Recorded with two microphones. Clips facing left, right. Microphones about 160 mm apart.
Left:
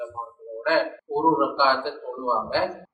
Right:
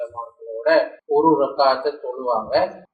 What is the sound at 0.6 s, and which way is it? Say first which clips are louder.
A man's voice: right 7 dB; 45° right (ahead or behind).